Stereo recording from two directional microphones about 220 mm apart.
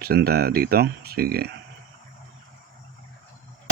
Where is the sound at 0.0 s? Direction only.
45° right (ahead or behind).